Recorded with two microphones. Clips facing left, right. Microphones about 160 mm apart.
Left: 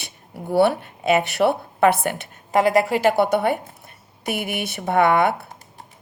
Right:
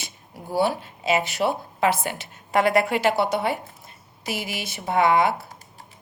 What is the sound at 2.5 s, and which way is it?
A woman's voice, 40° left (ahead or behind).